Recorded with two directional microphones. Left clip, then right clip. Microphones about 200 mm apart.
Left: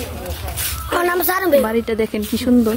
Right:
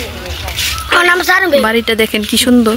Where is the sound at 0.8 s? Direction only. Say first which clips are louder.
Right 8 dB; 20° left (ahead or behind).